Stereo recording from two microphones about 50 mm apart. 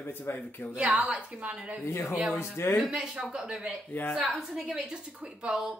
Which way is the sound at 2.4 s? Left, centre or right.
Left.